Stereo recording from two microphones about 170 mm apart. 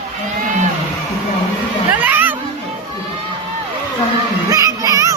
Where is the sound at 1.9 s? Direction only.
10° right (ahead or behind).